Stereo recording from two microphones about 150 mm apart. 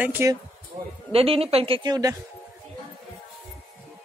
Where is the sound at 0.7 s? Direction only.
55° right (ahead or behind).